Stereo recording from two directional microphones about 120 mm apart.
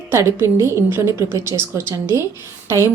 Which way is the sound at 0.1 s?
25° right (ahead or behind).